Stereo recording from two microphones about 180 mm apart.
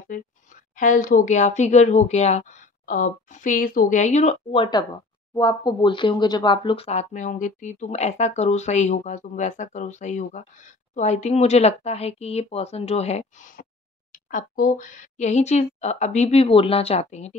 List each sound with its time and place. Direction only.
0.7 s speech: 45° left (ahead or behind)